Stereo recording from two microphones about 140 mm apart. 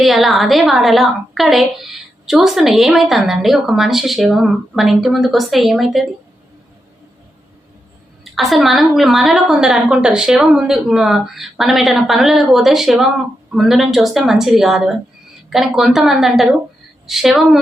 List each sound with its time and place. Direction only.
0.0 s a woman's voice: centre (ahead or behind)
8.2 s a woman's voice: centre (ahead or behind)